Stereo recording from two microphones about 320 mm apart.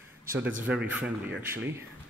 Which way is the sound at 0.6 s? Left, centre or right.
Centre.